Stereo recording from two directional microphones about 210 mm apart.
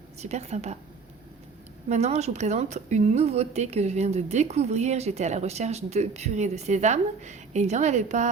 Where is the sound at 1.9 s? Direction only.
30° right (ahead or behind).